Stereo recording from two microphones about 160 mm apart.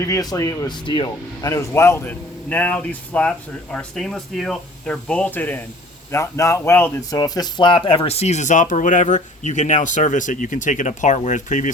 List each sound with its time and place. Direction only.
0.0 s speech: 20° left (ahead or behind); by 11.7 s 50° left (ahead or behind)